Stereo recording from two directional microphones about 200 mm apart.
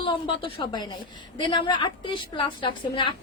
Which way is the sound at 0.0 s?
25° left (ahead or behind).